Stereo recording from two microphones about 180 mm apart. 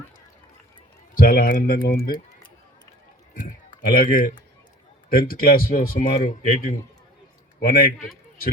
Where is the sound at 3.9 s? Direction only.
55° left (ahead or behind).